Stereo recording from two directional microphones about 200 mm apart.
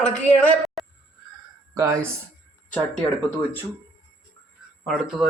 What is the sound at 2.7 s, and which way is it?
Speech, 5° left (ahead or behind).